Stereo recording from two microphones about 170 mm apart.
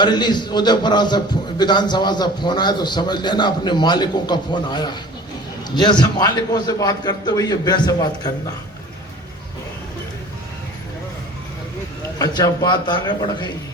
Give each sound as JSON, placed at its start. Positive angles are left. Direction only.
{"t": 0.0, "sound": "a man's voice", "side_deg": 25}
{"t": 12.2, "sound": "a man's voice", "side_deg": 25}